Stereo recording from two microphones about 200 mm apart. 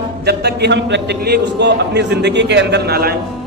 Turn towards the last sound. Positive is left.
turn(degrees=-50)  # may be behind; listen again after turning